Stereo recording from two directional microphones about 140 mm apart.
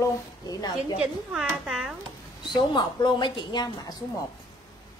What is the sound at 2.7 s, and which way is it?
A woman's voice, 35° left (ahead or behind).